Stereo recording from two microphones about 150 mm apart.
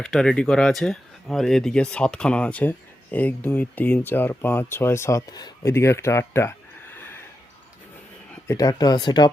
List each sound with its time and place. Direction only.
0.0 s speech: 5° left (ahead or behind)
6.9 s a sound: 15° left (ahead or behind)
8.4 s speech: 25° left (ahead or behind)